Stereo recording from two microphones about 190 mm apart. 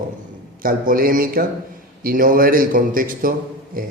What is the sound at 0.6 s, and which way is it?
A man's voice, 45° right (ahead or behind).